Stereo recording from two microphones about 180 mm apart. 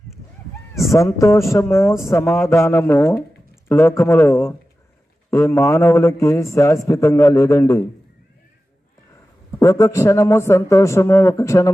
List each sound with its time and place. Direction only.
0.9 s a man's voice: 15° left (ahead or behind)
9.6 s a man's voice: 20° left (ahead or behind)